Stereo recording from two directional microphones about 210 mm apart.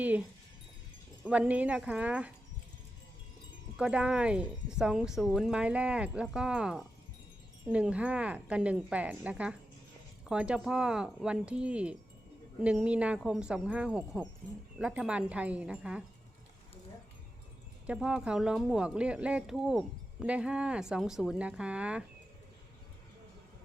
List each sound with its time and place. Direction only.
0.0 s speech: 10° right (ahead or behind)
3.8 s speech: 5° right (ahead or behind)
17.8 s speech: 5° right (ahead or behind)